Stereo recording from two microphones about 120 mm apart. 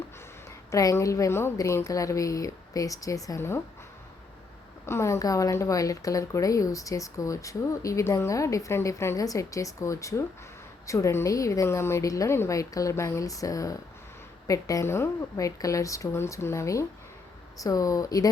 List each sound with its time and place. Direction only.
0.7 s a woman's voice: 25° left (ahead or behind)
4.9 s a woman's voice: 20° left (ahead or behind)